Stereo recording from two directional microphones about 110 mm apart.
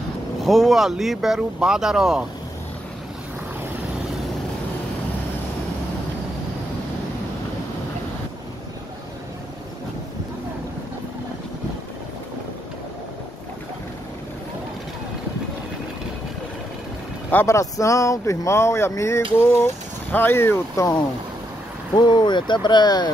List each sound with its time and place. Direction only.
0.4 s speech: centre (ahead or behind)
17.3 s speech: 20° left (ahead or behind)
17.6 s speech: 30° left (ahead or behind)
21.9 s speech: 40° left (ahead or behind)